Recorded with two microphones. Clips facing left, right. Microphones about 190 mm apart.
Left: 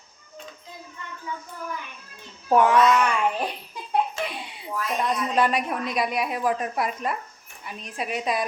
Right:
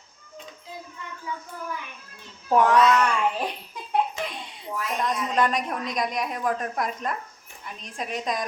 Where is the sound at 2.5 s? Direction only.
5° left (ahead or behind).